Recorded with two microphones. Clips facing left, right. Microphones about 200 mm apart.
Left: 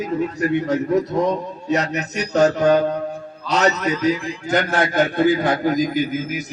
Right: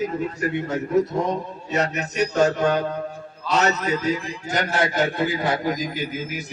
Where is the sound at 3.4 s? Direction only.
70° left (ahead or behind).